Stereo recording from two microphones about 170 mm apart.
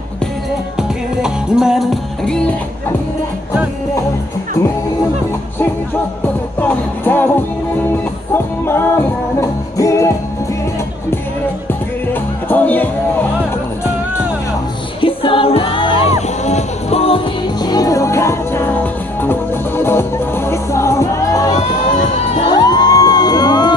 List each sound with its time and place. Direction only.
0.7 s music: 5° right (ahead or behind)
6.6 s music: 10° left (ahead or behind)
8.3 s music: 15° left (ahead or behind)
12.1 s music: 10° left (ahead or behind)
15.0 s music: 30° left (ahead or behind)
16.2 s music: 40° left (ahead or behind)
17.6 s music: 20° left (ahead or behind)